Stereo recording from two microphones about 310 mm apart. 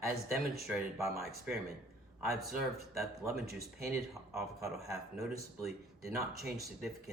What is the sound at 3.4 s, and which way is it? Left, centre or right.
Speech, right.